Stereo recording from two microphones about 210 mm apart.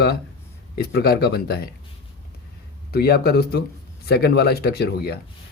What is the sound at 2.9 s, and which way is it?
Speech, 50° left (ahead or behind).